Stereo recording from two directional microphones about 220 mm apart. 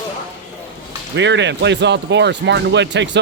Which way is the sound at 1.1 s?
55° right (ahead or behind).